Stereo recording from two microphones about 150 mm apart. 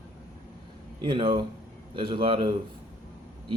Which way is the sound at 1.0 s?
35° right (ahead or behind).